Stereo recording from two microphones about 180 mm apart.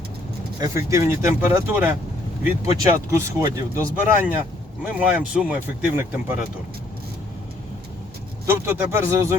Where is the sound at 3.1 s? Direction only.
15° right (ahead or behind).